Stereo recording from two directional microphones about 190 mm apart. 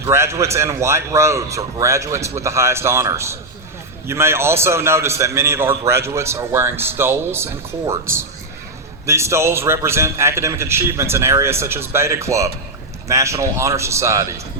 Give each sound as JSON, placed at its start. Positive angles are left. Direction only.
{"t": 0.0, "sound": "a man's voice", "side_deg": -15}